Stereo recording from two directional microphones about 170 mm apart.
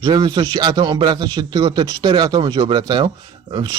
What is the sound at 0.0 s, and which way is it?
A man's voice, 25° right (ahead or behind).